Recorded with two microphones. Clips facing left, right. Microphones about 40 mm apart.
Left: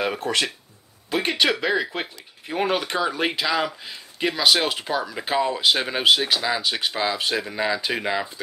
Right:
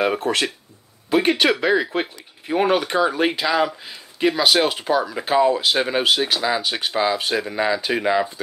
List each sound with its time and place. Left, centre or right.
0.0 s speech: centre